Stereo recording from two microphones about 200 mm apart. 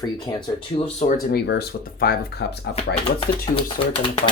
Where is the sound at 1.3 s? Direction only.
55° left (ahead or behind).